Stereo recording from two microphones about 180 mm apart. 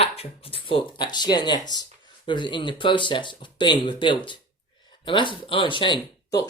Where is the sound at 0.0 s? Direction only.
30° left (ahead or behind).